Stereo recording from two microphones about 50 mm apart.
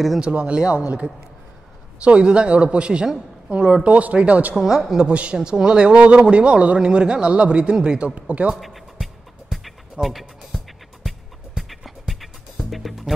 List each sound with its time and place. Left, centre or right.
0.2 s a man's voice: right
2.0 s a man's voice: right
4.6 s a woman's voice: centre
5.0 s a man's voice: right
8.5 s music: centre